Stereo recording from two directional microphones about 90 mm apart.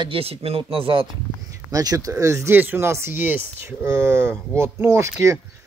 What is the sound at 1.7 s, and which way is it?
Speech, 45° right (ahead or behind).